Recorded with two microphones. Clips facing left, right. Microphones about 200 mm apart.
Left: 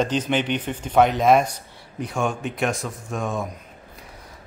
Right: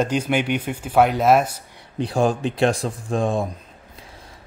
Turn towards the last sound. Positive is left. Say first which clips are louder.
# right 5 dB
turn(degrees=-30)  # may be behind; listen again after turning